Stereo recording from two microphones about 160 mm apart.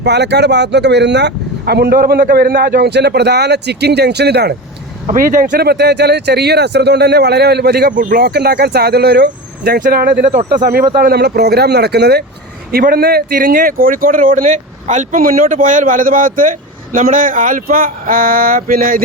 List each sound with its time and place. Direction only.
0.0 s speech: 90° right
5.1 s speech: 60° right (ahead or behind)
10.9 s speech: 75° right (ahead or behind)
12.7 s speech: 65° right (ahead or behind)